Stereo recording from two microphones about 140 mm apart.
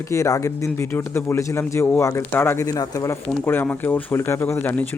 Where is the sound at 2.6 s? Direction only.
25° left (ahead or behind).